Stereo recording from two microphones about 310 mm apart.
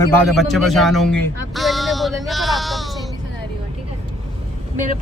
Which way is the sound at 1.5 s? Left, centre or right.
Centre.